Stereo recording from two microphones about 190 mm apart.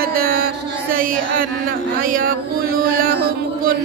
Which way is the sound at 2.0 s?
45° right (ahead or behind).